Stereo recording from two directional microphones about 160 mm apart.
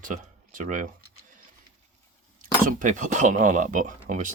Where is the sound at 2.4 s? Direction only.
55° right (ahead or behind).